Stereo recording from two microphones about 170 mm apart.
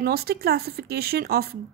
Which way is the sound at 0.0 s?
65° right (ahead or behind).